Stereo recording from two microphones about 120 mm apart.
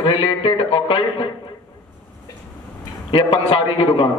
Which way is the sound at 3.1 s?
45° left (ahead or behind).